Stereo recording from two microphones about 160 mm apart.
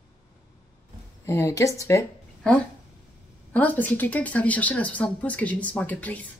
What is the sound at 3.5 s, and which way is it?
A woman's voice, 10° left (ahead or behind).